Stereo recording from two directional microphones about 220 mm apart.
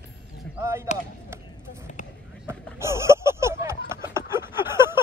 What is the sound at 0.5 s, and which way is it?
Speech, 10° right (ahead or behind).